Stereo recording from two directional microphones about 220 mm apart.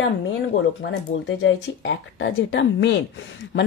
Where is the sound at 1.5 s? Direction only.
55° left (ahead or behind).